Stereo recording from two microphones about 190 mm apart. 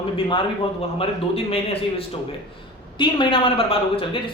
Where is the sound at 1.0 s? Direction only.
30° left (ahead or behind).